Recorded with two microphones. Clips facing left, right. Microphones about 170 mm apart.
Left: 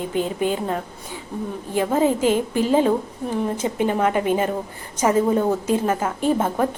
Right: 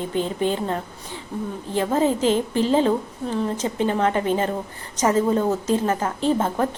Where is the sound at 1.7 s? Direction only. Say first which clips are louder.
Left 1 dB; 10° left (ahead or behind).